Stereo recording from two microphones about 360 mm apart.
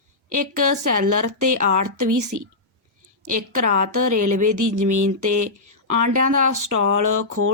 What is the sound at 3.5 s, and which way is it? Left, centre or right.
Speech, right.